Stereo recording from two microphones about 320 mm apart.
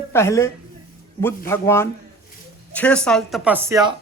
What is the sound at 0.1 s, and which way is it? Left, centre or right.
A woman's voice, centre.